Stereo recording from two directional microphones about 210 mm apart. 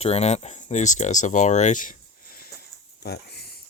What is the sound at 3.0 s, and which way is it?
Speech, 50° left (ahead or behind).